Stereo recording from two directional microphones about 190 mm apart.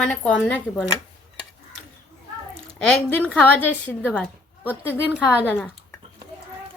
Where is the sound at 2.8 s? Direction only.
5° left (ahead or behind).